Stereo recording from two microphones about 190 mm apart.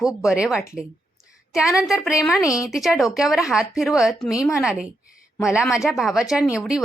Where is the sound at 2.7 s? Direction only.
Centre (ahead or behind).